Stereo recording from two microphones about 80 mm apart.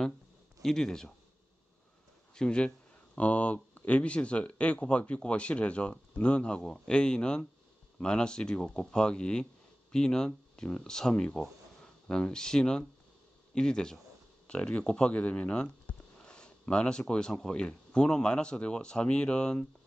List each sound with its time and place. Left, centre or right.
0.6 s speech: centre
2.3 s speech: centre